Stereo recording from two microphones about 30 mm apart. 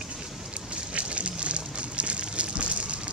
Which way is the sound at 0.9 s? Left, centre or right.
Right.